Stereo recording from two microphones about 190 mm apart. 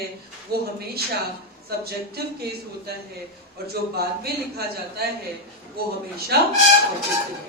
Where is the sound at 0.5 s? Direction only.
55° right (ahead or behind).